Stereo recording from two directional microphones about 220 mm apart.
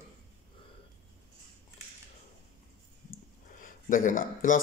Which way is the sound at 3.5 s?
35° left (ahead or behind).